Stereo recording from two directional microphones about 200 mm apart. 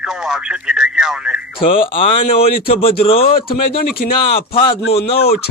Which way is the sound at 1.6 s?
25° left (ahead or behind).